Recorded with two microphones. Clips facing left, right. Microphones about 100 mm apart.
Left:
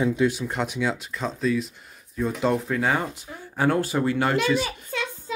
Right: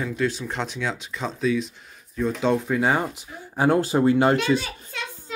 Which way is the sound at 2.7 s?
20° right (ahead or behind).